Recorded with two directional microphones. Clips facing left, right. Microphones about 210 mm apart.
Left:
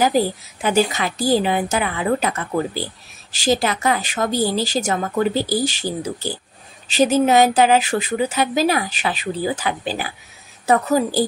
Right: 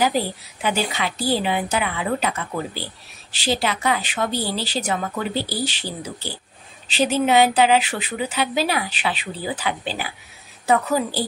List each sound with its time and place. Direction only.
0.0 s a woman's voice: 45° left (ahead or behind)